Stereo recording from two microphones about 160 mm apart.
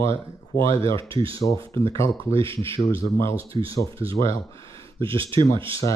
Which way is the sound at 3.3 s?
35° right (ahead or behind).